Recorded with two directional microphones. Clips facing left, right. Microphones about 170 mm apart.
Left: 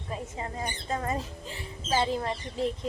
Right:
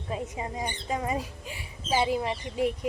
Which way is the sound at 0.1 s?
15° right (ahead or behind).